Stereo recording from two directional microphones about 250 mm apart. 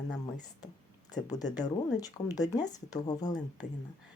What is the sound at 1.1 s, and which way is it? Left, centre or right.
Speech, centre.